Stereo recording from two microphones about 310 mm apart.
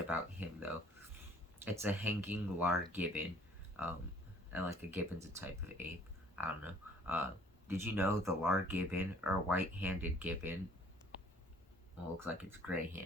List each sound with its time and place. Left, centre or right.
0.1 s speech: centre
4.5 s speech: centre
12.2 s speech: centre